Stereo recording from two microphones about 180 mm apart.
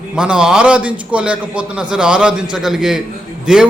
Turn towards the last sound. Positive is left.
turn(degrees=-5)  # may be behind; listen again after turning